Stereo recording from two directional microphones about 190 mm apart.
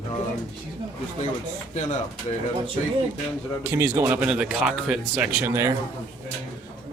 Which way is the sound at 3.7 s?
10° right (ahead or behind).